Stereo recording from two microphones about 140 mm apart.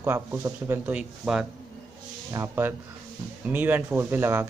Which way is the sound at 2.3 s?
20° right (ahead or behind).